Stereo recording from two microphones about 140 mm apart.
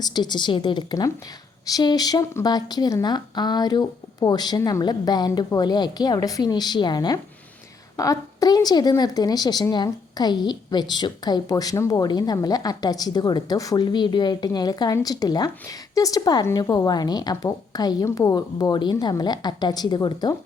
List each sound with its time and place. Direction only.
0.0 s a woman's voice: 30° left (ahead or behind)